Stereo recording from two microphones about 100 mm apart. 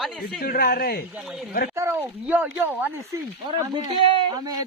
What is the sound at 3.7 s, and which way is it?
Speech, 45° right (ahead or behind).